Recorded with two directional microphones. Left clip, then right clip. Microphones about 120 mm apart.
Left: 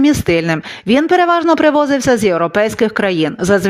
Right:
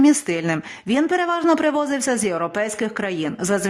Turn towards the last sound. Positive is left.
turn(degrees=30)  # may be behind; listen again after turning